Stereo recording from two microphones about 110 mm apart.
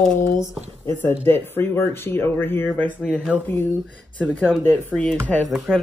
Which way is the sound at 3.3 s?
10° right (ahead or behind).